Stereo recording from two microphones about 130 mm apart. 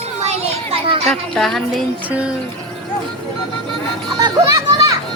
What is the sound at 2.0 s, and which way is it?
Music, 10° right (ahead or behind).